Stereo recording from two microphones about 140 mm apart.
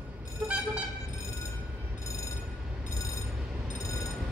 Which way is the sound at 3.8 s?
25° left (ahead or behind).